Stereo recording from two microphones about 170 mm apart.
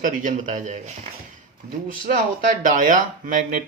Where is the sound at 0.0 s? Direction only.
50° right (ahead or behind).